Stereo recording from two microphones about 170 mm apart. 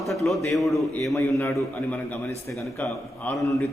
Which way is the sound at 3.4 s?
20° left (ahead or behind).